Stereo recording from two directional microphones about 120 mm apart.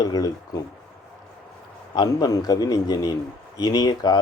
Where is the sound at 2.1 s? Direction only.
25° left (ahead or behind).